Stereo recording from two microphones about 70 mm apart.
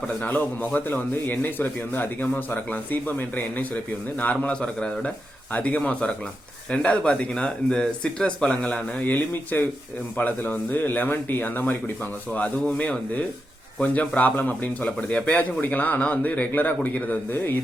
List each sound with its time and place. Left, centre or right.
0.6 s speech: left
9.0 s speech: left